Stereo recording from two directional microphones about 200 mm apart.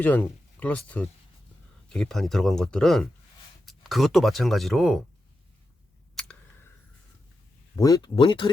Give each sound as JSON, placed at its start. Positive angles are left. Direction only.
{"t": 0.0, "sound": "speech", "side_deg": 10}
{"t": 7.8, "sound": "speech", "side_deg": 15}